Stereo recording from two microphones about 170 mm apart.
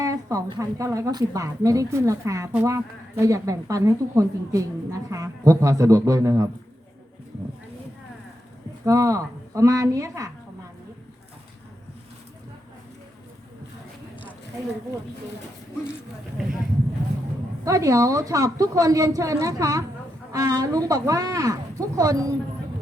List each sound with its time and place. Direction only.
0.0 s speech: 20° right (ahead or behind)
8.8 s speech: 20° right (ahead or behind)
17.7 s speech: 20° right (ahead or behind)